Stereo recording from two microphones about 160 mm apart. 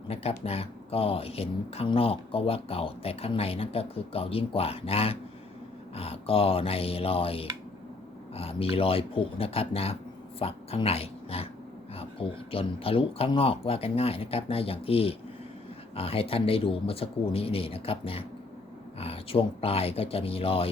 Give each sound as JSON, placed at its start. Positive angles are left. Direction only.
{"t": 0.1, "sound": "speech", "side_deg": 40}